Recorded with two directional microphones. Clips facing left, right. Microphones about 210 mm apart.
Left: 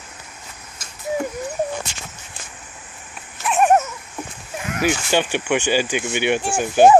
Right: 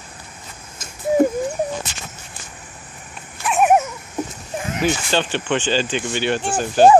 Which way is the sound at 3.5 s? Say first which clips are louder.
Even; centre (ahead or behind).